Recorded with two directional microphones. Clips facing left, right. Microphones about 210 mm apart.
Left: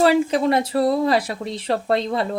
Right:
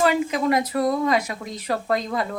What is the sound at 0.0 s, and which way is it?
Speech, 30° left (ahead or behind).